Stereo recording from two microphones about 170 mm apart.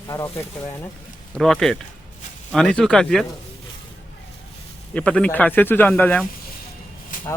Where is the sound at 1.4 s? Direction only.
Centre (ahead or behind).